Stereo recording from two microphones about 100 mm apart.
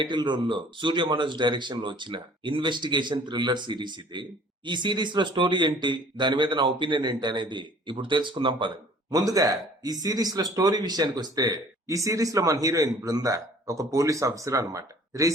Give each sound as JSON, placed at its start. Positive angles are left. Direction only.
{"t": 0.0, "sound": "speech", "side_deg": -50}
{"t": 9.0, "sound": "speech", "side_deg": -35}